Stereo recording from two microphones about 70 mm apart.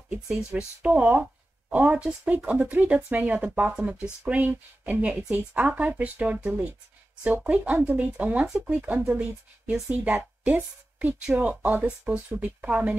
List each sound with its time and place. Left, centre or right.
0.1 s speech: centre
4.8 s speech: right
8.5 s a woman's voice: centre